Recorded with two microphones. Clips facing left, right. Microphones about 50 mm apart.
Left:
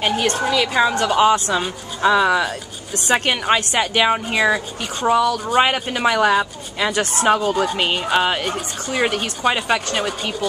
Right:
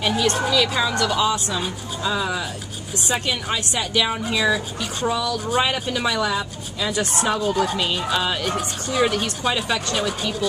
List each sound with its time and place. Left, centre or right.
0.0 s speech: left
0.4 s speech: left
1.6 s a woman's voice: left
8.1 s speech: left